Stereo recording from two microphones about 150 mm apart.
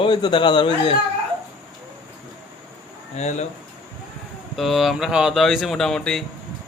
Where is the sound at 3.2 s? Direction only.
50° left (ahead or behind).